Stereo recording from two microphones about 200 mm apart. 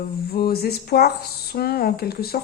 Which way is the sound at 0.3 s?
50° left (ahead or behind).